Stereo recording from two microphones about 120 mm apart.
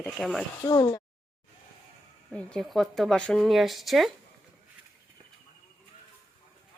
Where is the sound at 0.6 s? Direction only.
35° left (ahead or behind).